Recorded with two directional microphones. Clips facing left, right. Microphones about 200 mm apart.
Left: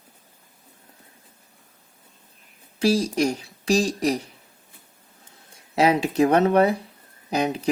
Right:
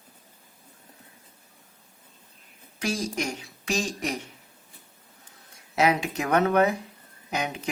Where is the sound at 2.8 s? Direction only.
35° left (ahead or behind).